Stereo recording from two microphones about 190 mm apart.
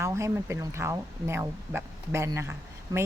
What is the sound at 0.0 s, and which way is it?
Speech, 15° right (ahead or behind).